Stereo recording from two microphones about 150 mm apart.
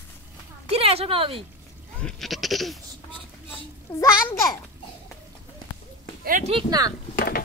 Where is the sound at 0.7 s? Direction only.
40° right (ahead or behind).